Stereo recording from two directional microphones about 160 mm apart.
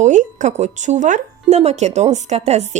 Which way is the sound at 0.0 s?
50° right (ahead or behind).